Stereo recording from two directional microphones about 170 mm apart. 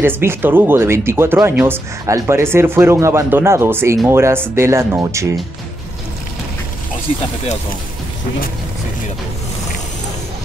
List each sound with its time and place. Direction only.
0.0 s speech: 15° right (ahead or behind)